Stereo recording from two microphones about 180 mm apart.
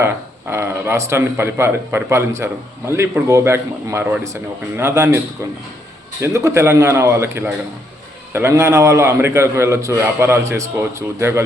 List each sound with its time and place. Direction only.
0.5 s a man's voice: 15° right (ahead or behind)
6.2 s a man's voice: 15° right (ahead or behind)